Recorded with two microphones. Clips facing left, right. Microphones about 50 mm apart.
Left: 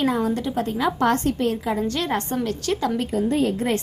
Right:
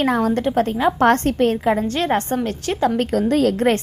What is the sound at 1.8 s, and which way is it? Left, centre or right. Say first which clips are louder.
A woman's voice: right 4 dB; right.